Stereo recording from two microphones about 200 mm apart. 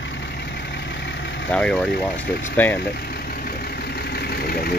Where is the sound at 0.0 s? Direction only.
60° left (ahead or behind).